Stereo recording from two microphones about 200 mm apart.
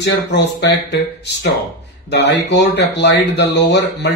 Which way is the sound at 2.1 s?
60° left (ahead or behind).